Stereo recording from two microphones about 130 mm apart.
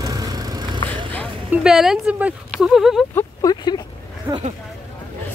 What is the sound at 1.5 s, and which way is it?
A woman's voice, 5° right (ahead or behind).